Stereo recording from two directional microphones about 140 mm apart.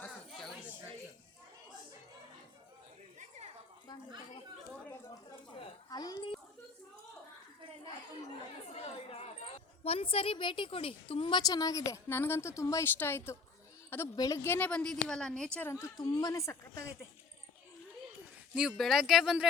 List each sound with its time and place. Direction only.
0.3 s chatter: centre (ahead or behind)
3.2 s a sound: 50° right (ahead or behind)
5.9 s dog: 30° left (ahead or behind)
8.7 s chatter: 45° left (ahead or behind)
9.8 s a woman's voice: 45° left (ahead or behind); by 15.4 s 5° left (ahead or behind)
15.5 s a woman's voice: 20° left (ahead or behind)
18.5 s speech: 5° right (ahead or behind)